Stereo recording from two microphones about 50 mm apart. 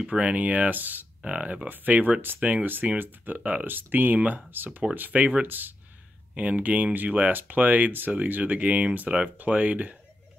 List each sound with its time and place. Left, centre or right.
0.0 s speech: right
1.2 s speech: right
1.7 s speech: right
6.3 s speech: right